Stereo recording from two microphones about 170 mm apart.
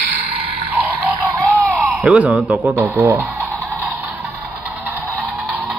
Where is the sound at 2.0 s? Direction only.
10° right (ahead or behind).